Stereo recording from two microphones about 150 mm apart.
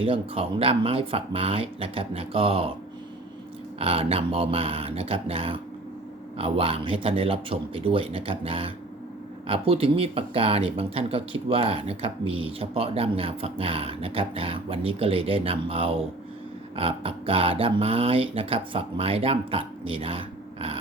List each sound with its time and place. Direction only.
0.0 s speech: 40° right (ahead or behind)
3.8 s speech: 40° right (ahead or behind)